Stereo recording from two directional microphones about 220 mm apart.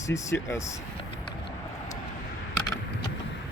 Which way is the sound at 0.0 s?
15° left (ahead or behind).